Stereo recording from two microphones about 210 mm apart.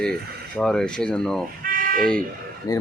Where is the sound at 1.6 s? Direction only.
40° right (ahead or behind).